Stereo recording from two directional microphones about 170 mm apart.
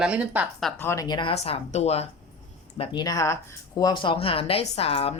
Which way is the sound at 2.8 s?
25° left (ahead or behind).